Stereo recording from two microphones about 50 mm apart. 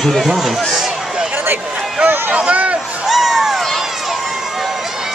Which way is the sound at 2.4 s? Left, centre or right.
Right.